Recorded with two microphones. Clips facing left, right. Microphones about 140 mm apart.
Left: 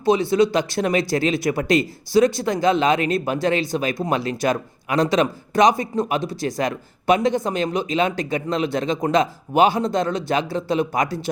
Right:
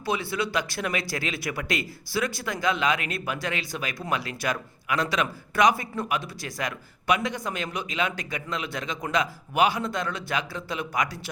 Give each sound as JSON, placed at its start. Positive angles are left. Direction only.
{"t": 0.0, "sound": "speech", "side_deg": 25}